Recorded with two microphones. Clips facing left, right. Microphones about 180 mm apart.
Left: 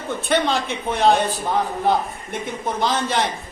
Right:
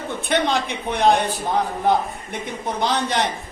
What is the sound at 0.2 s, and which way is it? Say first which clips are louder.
Speech: even; 15° right (ahead or behind).